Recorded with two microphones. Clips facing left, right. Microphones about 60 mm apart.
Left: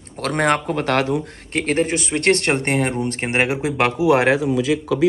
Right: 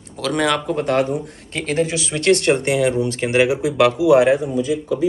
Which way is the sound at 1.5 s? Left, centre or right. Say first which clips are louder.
Left 1 dB; left.